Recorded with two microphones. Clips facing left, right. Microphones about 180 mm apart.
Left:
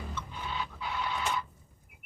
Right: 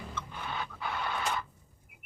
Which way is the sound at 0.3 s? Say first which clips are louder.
Even; 55° right (ahead or behind).